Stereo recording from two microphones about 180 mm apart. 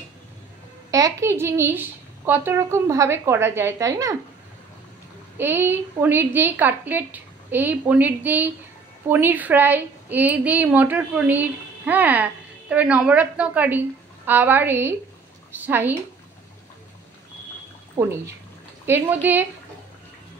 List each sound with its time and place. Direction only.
0.9 s a woman's voice: 15° right (ahead or behind)
5.4 s a woman's voice: 10° right (ahead or behind)
17.9 s a woman's voice: 15° right (ahead or behind)